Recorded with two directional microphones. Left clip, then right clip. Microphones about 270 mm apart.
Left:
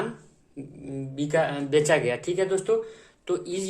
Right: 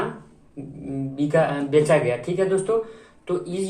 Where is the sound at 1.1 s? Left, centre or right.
Left.